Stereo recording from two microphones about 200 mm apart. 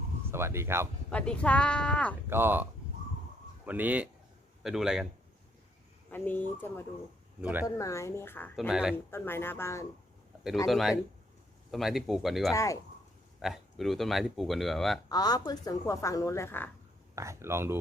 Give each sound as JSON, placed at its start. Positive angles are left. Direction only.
{"t": 0.3, "sound": "speech", "side_deg": -10}
{"t": 1.1, "sound": "speech", "side_deg": 5}
{"t": 2.3, "sound": "speech", "side_deg": -10}
{"t": 3.7, "sound": "speech", "side_deg": -10}
{"t": 6.1, "sound": "a woman's voice", "side_deg": 10}
{"t": 7.4, "sound": "speech", "side_deg": -5}
{"t": 7.8, "sound": "a woman's voice", "side_deg": 15}
{"t": 8.5, "sound": "speech", "side_deg": -5}
{"t": 9.0, "sound": "a woman's voice", "side_deg": 10}
{"t": 10.7, "sound": "speech", "side_deg": 0}
{"t": 12.5, "sound": "a woman's voice", "side_deg": 15}
{"t": 13.4, "sound": "speech", "side_deg": 0}
{"t": 15.1, "sound": "a woman's voice", "side_deg": 20}
{"t": 17.2, "sound": "speech", "side_deg": -15}